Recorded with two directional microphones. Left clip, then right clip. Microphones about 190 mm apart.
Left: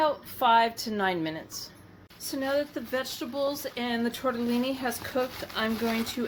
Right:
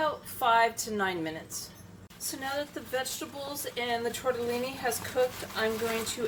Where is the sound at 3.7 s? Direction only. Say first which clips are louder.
Even; 45° left (ahead or behind).